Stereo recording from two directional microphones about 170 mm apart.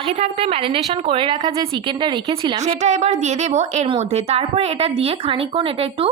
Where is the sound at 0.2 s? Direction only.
35° right (ahead or behind).